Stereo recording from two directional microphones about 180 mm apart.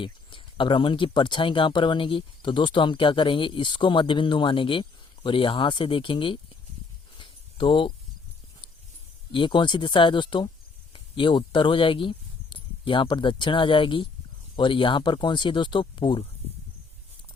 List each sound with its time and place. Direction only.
0.0 s speech: 30° left (ahead or behind)
7.2 s a sound: 25° left (ahead or behind)
9.3 s speech: 25° left (ahead or behind)